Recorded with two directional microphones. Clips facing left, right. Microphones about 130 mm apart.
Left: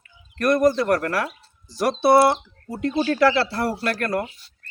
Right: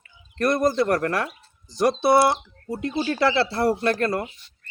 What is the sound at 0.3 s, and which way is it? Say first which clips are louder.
Speech: left 2 dB; 30° right (ahead or behind).